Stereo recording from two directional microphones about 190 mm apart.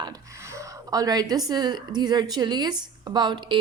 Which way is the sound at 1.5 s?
20° right (ahead or behind).